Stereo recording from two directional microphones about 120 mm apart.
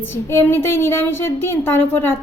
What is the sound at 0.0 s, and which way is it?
A woman's voice, 20° left (ahead or behind).